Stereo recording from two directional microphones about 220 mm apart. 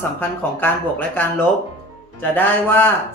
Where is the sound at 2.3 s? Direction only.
10° left (ahead or behind).